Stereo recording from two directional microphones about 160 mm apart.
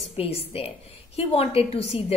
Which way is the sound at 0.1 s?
40° left (ahead or behind).